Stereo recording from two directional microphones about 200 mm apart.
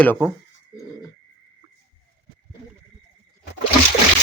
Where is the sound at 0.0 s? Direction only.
10° left (ahead or behind).